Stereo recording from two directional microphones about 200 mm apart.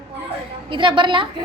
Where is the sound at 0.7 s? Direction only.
25° right (ahead or behind).